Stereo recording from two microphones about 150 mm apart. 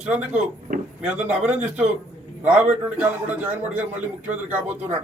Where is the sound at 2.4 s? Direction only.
10° right (ahead or behind).